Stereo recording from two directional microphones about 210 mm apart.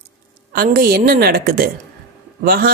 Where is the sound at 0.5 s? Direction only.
45° right (ahead or behind).